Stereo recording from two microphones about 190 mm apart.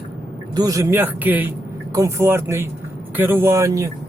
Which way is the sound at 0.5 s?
20° right (ahead or behind).